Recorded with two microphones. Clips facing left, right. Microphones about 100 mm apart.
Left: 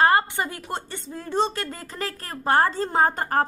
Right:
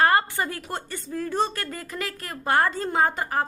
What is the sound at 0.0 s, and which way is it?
A woman's voice, 20° left (ahead or behind).